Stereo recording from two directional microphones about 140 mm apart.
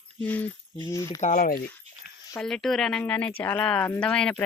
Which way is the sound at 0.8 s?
25° left (ahead or behind).